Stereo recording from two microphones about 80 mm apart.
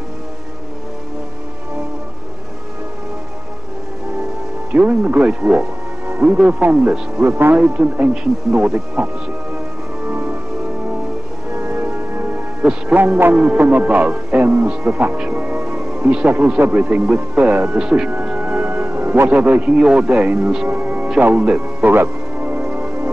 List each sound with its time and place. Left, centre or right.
4.7 s a man's voice: centre
10.0 s music: right
11.5 s a man's voice: right
17.7 s a man's voice: centre
20.6 s music: right